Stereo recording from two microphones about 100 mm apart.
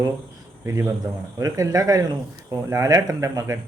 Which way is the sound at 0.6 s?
30° right (ahead or behind).